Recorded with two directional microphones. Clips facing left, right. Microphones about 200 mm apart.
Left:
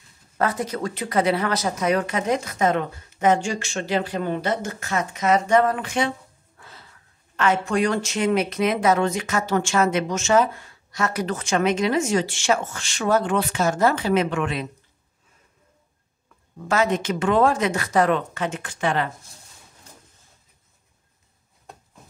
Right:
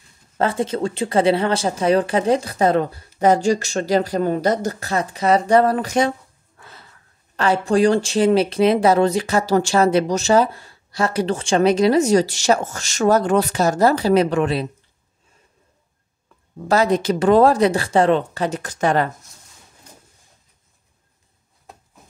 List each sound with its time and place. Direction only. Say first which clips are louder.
0.4 s speech: right 4 dB; 25° right (ahead or behind)
7.3 s speech: right 4 dB; 35° right (ahead or behind)
16.5 s speech: right 4 dB; 35° right (ahead or behind)
21.7 s a sound: even; centre (ahead or behind)